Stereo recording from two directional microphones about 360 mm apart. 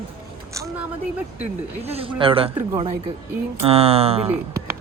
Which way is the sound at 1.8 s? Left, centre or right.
Centre.